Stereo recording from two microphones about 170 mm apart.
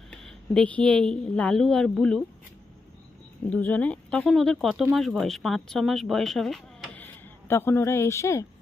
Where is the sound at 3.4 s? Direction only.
10° left (ahead or behind).